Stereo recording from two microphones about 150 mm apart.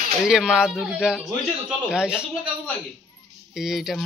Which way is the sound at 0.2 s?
5° right (ahead or behind).